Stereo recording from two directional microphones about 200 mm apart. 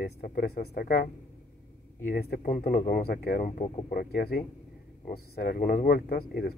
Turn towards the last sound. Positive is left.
turn(degrees=50)  # may be behind; listen again after turning